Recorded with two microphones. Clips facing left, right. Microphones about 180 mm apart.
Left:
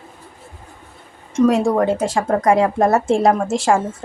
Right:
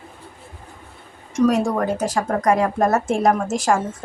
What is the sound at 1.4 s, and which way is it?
A woman's voice, 25° left (ahead or behind).